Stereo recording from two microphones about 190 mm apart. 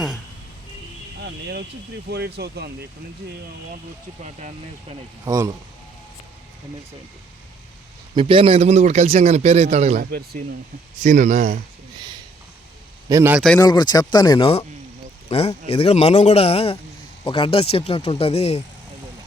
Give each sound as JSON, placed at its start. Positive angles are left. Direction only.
{"t": 1.2, "sound": "speech", "side_deg": -60}
{"t": 4.2, "sound": "speech", "side_deg": -40}
{"t": 5.2, "sound": "speech", "side_deg": -15}
{"t": 8.1, "sound": "speech", "side_deg": -25}
{"t": 10.0, "sound": "speech", "side_deg": -50}
{"t": 10.9, "sound": "speech", "side_deg": -40}
{"t": 13.1, "sound": "a man's voice", "side_deg": -15}
{"t": 13.3, "sound": "speech", "side_deg": 0}
{"t": 13.6, "sound": "speech", "side_deg": 20}